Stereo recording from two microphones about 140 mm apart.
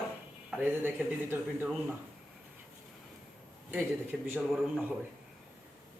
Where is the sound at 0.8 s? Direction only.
15° right (ahead or behind).